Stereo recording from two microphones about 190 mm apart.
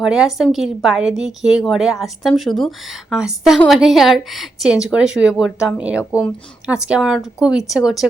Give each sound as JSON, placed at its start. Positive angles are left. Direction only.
{"t": 0.0, "sound": "a woman's voice", "side_deg": -5}